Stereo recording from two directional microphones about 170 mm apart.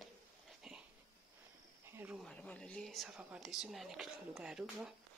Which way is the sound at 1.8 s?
10° right (ahead or behind).